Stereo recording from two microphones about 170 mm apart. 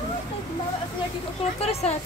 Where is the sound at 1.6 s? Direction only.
40° left (ahead or behind).